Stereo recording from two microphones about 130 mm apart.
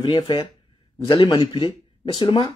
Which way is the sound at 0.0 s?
40° left (ahead or behind).